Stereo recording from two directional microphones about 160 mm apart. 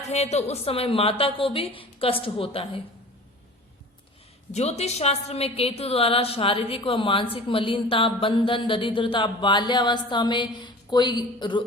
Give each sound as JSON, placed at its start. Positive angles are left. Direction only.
{"t": 0.1, "sound": "a woman's voice", "side_deg": 45}
{"t": 4.5, "sound": "a woman's voice", "side_deg": 40}